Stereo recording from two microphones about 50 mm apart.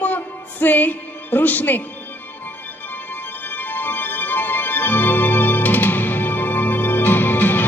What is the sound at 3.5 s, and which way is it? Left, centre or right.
Music, left.